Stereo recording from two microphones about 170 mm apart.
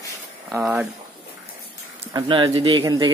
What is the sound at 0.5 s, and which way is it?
Speech, 5° right (ahead or behind).